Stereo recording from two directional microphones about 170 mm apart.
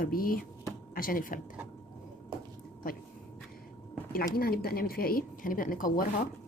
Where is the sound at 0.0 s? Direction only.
55° left (ahead or behind).